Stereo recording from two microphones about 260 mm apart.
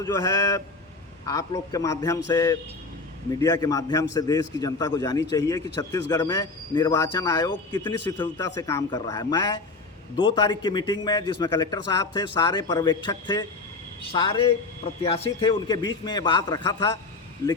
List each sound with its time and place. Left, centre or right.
0.0 s a man's voice: centre